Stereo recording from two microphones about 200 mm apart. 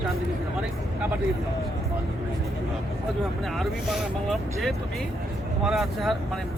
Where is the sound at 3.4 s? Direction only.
Centre (ahead or behind).